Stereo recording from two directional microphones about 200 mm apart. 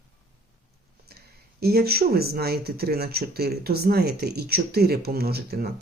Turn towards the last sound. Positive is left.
turn(degrees=-50)  # may be behind; listen again after turning